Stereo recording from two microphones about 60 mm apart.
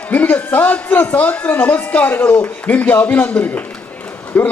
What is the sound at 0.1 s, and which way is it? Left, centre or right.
A man's voice, left.